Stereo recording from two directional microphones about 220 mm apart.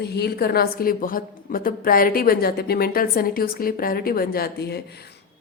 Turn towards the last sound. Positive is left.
turn(degrees=45)  # may be behind; listen again after turning